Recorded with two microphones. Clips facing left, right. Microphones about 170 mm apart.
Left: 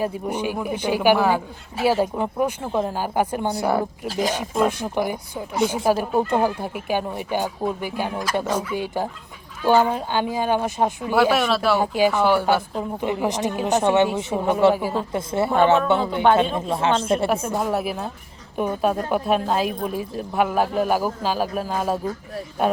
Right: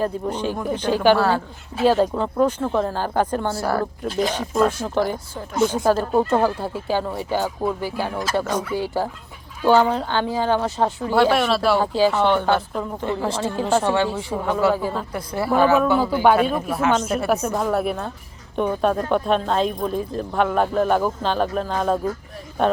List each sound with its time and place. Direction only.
0.0 s speech: 10° left (ahead or behind)
11.1 s speech: 5° left (ahead or behind)
11.8 s speech: 15° left (ahead or behind)
17.4 s speech: 5° left (ahead or behind)